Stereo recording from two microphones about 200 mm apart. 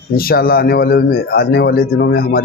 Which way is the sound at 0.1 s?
50° left (ahead or behind).